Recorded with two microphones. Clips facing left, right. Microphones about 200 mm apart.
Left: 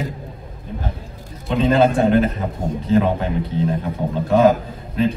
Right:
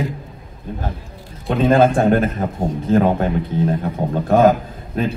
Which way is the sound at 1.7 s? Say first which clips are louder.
Right 1 dB; 50° right (ahead or behind).